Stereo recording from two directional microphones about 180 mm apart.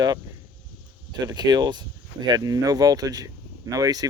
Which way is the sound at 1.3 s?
20° right (ahead or behind).